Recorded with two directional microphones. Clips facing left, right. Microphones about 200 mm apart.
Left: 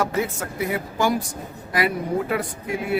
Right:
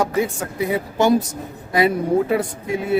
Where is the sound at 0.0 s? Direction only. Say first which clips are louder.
Right 3 dB; 15° right (ahead or behind).